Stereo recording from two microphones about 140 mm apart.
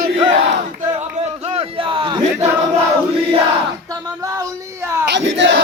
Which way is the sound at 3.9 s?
25° right (ahead or behind).